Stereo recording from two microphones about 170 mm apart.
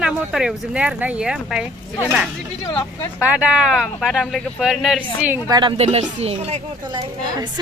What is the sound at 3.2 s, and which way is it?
Speech, 10° right (ahead or behind).